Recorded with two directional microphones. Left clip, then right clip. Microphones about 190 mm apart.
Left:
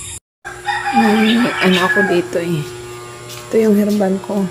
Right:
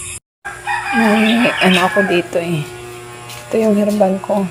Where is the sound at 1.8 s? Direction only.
5° left (ahead or behind).